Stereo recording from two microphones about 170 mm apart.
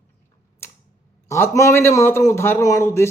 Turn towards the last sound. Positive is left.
turn(degrees=15)  # may be behind; listen again after turning